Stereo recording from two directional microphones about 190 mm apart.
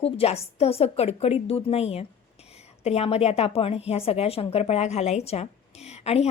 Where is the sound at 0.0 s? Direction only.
30° left (ahead or behind).